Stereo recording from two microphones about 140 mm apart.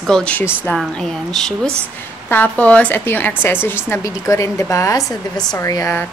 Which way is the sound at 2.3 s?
10° left (ahead or behind).